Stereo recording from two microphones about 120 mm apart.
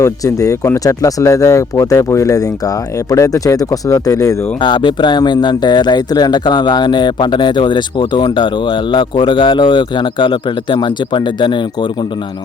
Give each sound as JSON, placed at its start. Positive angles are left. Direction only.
{"t": 0.0, "sound": "speech", "side_deg": 25}